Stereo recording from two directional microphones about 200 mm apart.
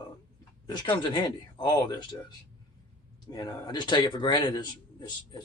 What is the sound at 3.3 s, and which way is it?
A man's voice, 20° left (ahead or behind).